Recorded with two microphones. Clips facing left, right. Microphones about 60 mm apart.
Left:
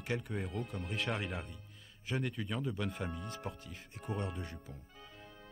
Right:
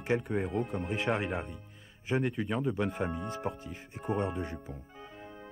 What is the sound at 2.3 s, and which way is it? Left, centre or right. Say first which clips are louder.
Speech: right 7 dB; right.